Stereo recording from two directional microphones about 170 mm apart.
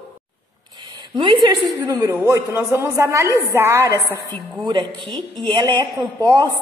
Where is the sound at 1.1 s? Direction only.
30° right (ahead or behind).